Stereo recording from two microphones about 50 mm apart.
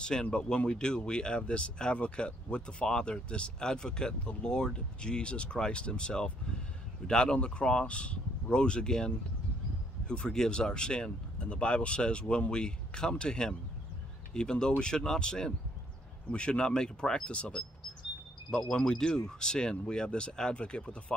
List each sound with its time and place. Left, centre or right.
0.0 s speech: centre